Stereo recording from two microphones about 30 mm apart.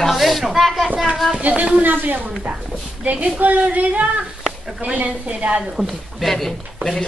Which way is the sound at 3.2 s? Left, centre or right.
Right.